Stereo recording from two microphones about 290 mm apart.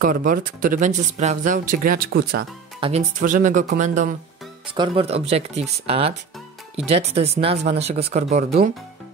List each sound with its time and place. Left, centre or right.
0.0 s speech: right